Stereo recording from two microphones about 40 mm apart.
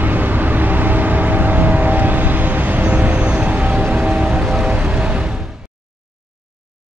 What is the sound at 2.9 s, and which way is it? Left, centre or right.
Music, right.